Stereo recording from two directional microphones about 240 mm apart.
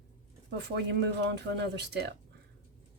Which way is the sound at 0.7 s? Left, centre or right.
Right.